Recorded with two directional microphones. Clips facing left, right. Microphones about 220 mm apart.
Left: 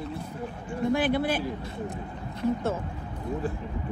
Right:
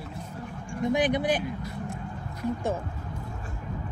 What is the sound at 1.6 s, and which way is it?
Vehicle, 25° left (ahead or behind).